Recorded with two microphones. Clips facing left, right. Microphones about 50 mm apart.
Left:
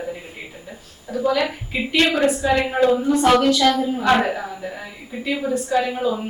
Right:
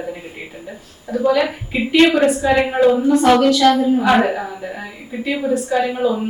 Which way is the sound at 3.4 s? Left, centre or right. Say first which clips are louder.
Right 4 dB; centre.